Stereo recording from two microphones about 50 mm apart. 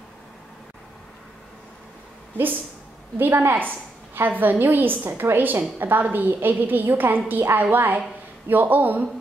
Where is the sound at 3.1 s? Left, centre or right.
Right.